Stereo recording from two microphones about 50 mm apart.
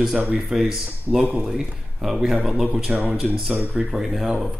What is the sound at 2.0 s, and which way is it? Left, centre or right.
Speech, centre.